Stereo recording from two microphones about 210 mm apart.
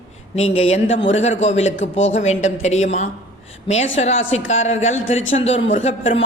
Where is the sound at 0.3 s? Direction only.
30° left (ahead or behind).